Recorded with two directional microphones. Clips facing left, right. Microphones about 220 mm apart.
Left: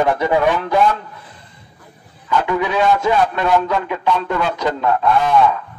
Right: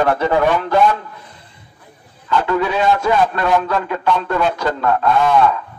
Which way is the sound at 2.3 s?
15° left (ahead or behind).